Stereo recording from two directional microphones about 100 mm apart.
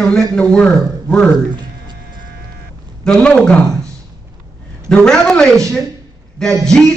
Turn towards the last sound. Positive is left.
turn(degrees=5)  # may be behind; listen again after turning